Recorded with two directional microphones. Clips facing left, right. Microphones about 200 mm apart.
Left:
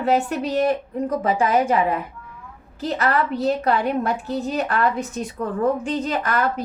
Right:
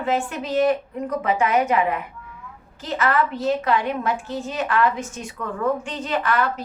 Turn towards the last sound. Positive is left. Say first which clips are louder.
# even
turn(degrees=40)  # may be behind; listen again after turning